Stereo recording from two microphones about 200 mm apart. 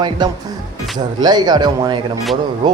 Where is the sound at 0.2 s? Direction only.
20° right (ahead or behind).